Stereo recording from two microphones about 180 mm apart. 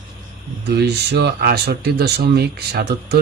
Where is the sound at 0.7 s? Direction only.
65° right (ahead or behind).